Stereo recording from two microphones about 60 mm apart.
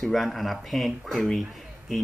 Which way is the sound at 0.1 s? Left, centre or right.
Centre.